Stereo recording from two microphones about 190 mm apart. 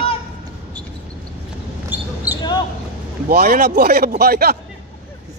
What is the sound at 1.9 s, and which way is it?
Basketball bounce, 10° right (ahead or behind).